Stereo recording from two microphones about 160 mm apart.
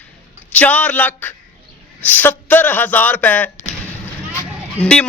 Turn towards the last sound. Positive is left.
turn(degrees=5)  # may be behind; listen again after turning